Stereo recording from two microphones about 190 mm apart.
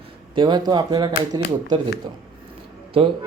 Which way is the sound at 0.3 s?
20° right (ahead or behind).